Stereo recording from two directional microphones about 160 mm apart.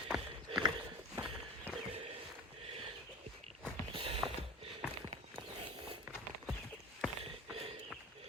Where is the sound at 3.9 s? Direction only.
35° right (ahead or behind).